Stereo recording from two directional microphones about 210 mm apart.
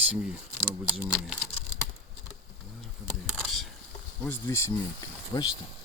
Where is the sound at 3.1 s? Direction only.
Centre (ahead or behind).